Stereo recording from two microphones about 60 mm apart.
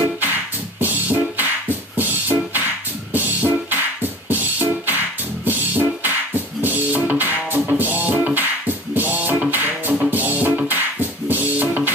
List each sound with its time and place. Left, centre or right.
0.0 s music: right